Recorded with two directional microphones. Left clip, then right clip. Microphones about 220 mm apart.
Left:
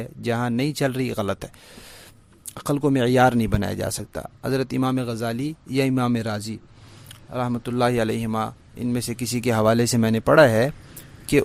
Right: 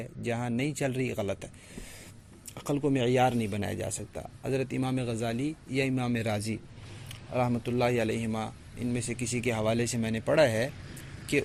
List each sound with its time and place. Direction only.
0.3 s speech: 35° left (ahead or behind)
2.6 s speech: 35° left (ahead or behind)
6.2 s a man's voice: 20° left (ahead or behind)
7.6 s speech: 35° left (ahead or behind)